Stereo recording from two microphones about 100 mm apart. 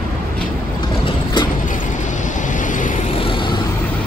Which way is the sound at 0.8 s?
50° left (ahead or behind).